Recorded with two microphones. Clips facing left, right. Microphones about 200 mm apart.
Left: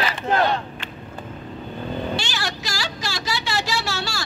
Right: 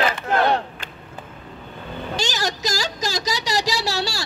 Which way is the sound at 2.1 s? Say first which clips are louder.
Right 3 dB; 40° right (ahead or behind).